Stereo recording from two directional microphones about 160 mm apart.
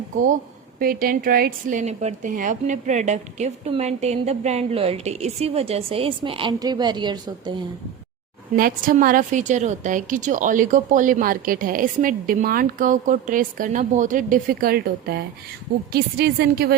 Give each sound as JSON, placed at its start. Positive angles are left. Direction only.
{"t": 0.8, "sound": "a woman's voice", "side_deg": -65}
{"t": 1.8, "sound": "a woman's voice", "side_deg": -45}
{"t": 8.5, "sound": "a woman's voice", "side_deg": -60}
{"t": 15.9, "sound": "a woman's voice", "side_deg": -85}